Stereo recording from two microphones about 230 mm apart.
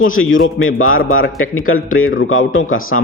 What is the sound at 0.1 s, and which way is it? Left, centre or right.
Speech, left.